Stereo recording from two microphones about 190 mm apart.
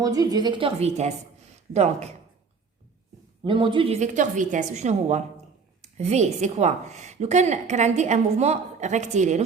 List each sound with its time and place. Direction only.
0.0 s a woman's voice: 20° right (ahead or behind); by 2.1 s 35° right (ahead or behind)
3.4 s a woman's voice: 25° right (ahead or behind)